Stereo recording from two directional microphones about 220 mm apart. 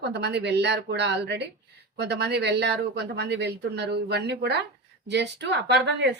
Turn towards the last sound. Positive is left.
turn(degrees=-50)  # may be behind; listen again after turning